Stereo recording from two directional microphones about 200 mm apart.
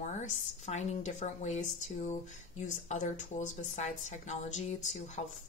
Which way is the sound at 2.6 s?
40° left (ahead or behind).